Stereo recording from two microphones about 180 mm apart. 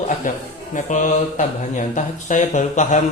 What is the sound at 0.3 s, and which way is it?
A man's voice, 50° left (ahead or behind).